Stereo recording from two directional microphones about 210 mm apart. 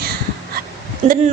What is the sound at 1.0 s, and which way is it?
Speech, 30° right (ahead or behind).